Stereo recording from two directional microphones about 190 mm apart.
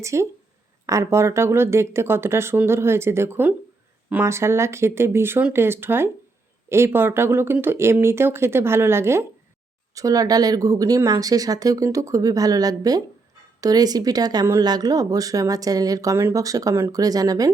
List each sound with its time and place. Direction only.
0.0 s speech: 15° right (ahead or behind)